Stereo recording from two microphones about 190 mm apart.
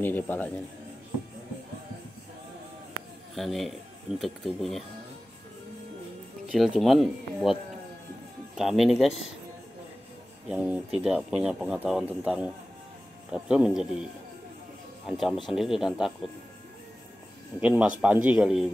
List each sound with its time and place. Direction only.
0.0 s a man's voice: 10° left (ahead or behind)
3.3 s speech: centre (ahead or behind)
6.5 s speech: centre (ahead or behind)
8.5 s speech: centre (ahead or behind)
10.5 s speech: 5° right (ahead or behind)
15.0 s speech: centre (ahead or behind)
17.6 s speech: 5° right (ahead or behind)